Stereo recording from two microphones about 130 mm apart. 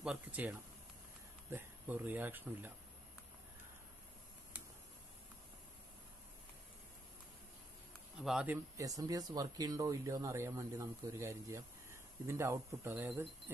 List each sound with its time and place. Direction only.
0.0 s speech: 10° right (ahead or behind)
8.2 s speech: 5° right (ahead or behind)
8.7 s speech: 25° right (ahead or behind)